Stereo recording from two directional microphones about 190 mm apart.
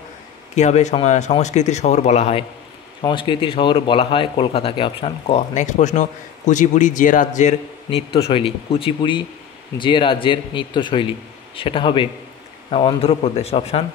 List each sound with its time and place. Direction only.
0.6 s speech: 35° left (ahead or behind)
3.0 s speech: 25° left (ahead or behind)